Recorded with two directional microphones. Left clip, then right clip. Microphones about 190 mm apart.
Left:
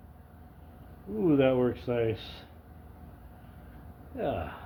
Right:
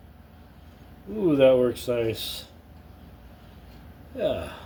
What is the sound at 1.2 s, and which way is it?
Speech, 15° left (ahead or behind).